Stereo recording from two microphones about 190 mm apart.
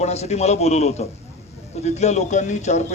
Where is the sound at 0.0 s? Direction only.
35° left (ahead or behind).